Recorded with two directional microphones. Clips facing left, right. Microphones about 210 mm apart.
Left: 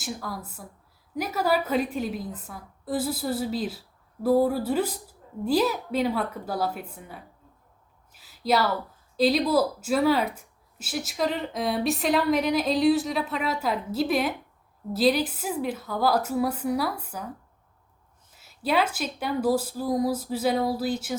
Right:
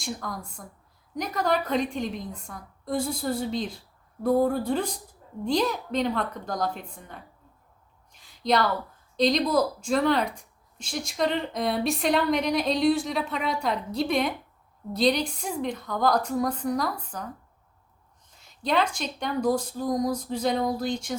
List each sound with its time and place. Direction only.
0.0 s speech: 5° left (ahead or behind)
8.1 s a sound: 5° left (ahead or behind)
9.1 s speech: 5° left (ahead or behind)
18.3 s speech: 5° left (ahead or behind)